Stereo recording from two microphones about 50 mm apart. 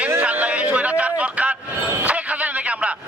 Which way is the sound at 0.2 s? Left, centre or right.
Right.